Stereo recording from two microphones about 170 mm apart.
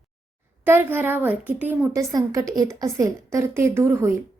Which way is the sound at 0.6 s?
10° right (ahead or behind).